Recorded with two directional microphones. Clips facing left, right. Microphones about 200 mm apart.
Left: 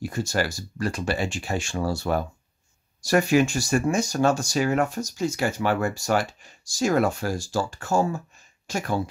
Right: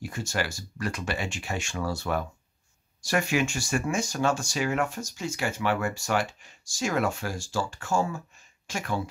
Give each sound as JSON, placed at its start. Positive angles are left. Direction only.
{"t": 0.0, "sound": "speech", "side_deg": 35}